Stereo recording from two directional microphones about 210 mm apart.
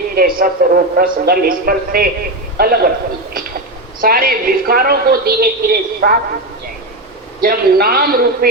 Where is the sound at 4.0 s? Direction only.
45° right (ahead or behind).